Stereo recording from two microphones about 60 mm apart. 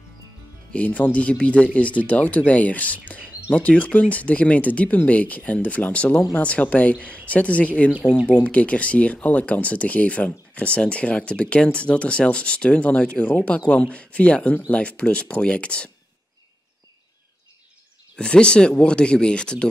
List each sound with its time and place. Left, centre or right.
0.7 s speech: left
18.1 s speech: centre